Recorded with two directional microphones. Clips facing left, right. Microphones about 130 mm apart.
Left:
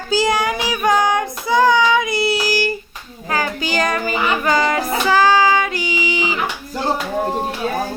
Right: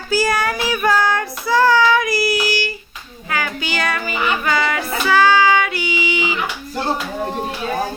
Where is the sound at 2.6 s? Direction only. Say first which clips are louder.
Left 5 dB; 45° left (ahead or behind).